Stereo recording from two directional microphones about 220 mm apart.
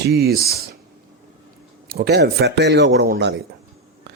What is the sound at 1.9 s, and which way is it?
Speech, 45° right (ahead or behind).